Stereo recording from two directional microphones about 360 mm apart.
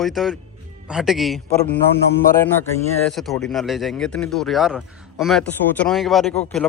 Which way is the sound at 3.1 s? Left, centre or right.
Centre.